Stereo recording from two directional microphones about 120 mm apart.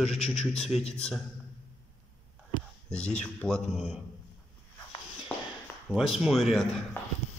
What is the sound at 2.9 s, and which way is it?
Speech, 10° left (ahead or behind).